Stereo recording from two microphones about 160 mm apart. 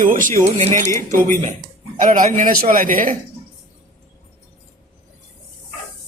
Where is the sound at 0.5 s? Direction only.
45° right (ahead or behind).